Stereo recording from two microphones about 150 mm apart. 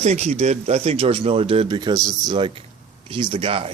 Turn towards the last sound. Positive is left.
turn(degrees=-35)  # may be behind; listen again after turning